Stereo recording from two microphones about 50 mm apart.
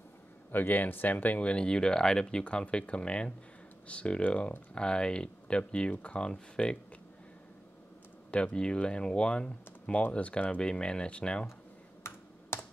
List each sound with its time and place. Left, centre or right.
0.5 s speech: left; by 6.8 s centre
8.5 s speech: centre
12.0 s computer keyboard: left